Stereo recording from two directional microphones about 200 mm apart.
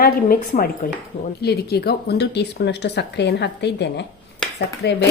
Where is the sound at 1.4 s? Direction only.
55° left (ahead or behind).